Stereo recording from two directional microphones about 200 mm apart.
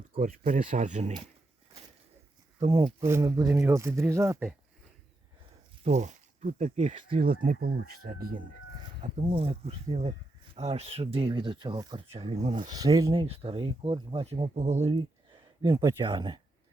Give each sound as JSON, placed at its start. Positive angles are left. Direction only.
{"t": 0.1, "sound": "speech", "side_deg": -40}
{"t": 2.6, "sound": "speech", "side_deg": -30}
{"t": 3.0, "sound": "speech", "side_deg": -15}
{"t": 5.8, "sound": "speech", "side_deg": -35}
{"t": 9.0, "sound": "speech", "side_deg": -35}
{"t": 12.1, "sound": "speech", "side_deg": -30}
{"t": 12.7, "sound": "speech", "side_deg": -20}
{"t": 13.2, "sound": "speech", "side_deg": -30}